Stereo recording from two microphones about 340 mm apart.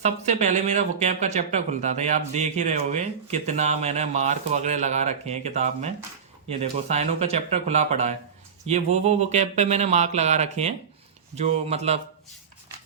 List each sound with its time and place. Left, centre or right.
0.0 s speech: centre